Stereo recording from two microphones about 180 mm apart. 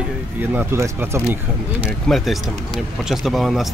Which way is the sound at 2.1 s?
5° left (ahead or behind).